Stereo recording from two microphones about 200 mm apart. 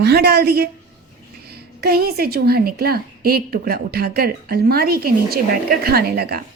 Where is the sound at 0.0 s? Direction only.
55° right (ahead or behind).